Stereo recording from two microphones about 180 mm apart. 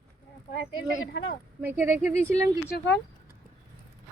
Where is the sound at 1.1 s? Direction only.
70° left (ahead or behind).